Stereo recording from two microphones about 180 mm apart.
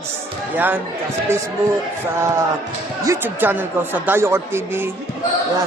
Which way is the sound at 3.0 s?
15° right (ahead or behind).